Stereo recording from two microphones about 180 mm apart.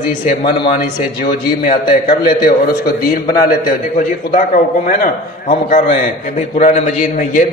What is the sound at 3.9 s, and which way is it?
A man's voice, 50° left (ahead or behind).